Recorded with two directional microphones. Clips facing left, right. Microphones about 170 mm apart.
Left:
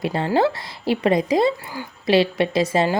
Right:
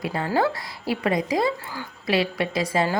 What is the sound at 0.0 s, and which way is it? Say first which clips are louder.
A woman's voice: left 4 dB; 25° left (ahead or behind).